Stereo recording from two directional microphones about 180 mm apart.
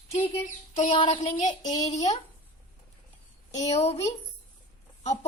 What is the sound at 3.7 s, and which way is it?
Speech, 35° left (ahead or behind).